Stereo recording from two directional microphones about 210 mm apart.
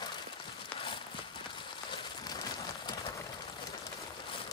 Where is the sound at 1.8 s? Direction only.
20° left (ahead or behind).